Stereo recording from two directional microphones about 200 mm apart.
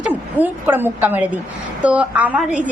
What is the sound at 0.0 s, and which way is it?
A woman's voice, 10° right (ahead or behind).